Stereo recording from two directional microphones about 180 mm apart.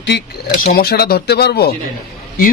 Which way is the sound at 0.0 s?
65° left (ahead or behind).